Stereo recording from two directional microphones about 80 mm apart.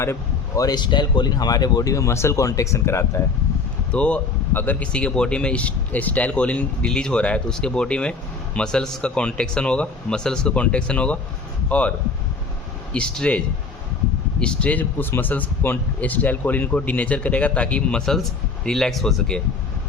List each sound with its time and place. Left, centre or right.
0.0 s speech: left
0.6 s speech: left
3.9 s a man's voice: centre